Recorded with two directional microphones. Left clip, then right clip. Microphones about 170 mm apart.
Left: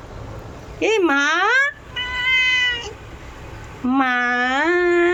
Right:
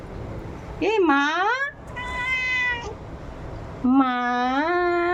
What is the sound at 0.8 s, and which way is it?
Speech, 10° left (ahead or behind).